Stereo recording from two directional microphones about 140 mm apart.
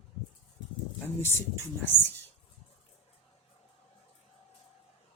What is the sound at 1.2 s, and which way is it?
Speech, 15° left (ahead or behind).